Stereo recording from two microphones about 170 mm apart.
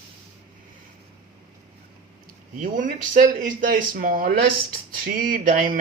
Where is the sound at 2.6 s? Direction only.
50° right (ahead or behind).